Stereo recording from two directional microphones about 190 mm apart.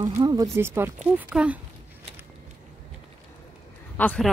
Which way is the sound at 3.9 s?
5° left (ahead or behind).